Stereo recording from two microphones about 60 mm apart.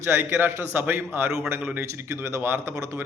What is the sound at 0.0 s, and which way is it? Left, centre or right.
A man's voice, right.